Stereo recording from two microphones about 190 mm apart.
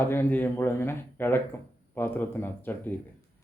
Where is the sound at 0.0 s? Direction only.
10° left (ahead or behind).